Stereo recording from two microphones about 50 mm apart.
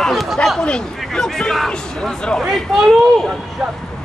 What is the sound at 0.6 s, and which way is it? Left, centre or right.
Speech, centre.